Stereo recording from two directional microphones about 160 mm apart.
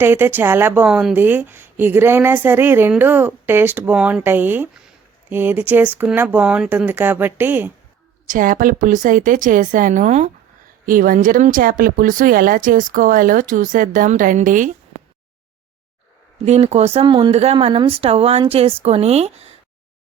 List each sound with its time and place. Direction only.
0.0 s a woman's voice: 15° right (ahead or behind)
8.3 s speech: 60° right (ahead or behind)
10.8 s speech: 60° right (ahead or behind)
16.5 s speech: 40° right (ahead or behind)